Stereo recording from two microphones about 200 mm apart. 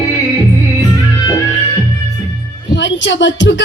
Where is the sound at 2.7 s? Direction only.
65° left (ahead or behind).